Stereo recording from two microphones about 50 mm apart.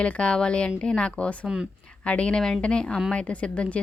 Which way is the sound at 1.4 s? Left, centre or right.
Centre.